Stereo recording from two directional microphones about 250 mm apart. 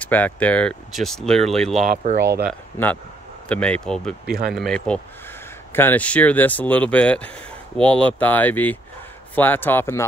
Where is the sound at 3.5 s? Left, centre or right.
Centre.